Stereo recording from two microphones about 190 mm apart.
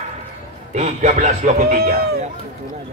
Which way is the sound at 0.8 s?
40° right (ahead or behind).